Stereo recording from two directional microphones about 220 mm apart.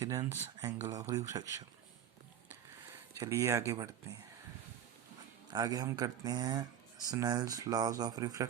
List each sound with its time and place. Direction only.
0.0 s speech: 15° right (ahead or behind)
2.5 s a sound: 10° right (ahead or behind)
5.5 s speech: 15° right (ahead or behind)